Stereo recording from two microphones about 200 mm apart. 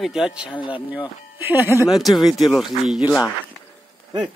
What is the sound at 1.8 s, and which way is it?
Speech, centre (ahead or behind).